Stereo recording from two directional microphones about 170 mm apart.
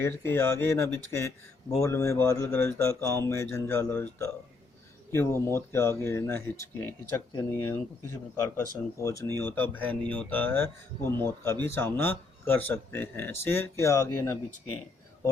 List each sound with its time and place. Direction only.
0.0 s speech: 15° left (ahead or behind)